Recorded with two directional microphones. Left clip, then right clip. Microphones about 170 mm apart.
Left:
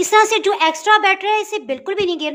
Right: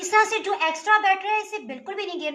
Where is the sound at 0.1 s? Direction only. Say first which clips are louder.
Left 5 dB; 65° left (ahead or behind).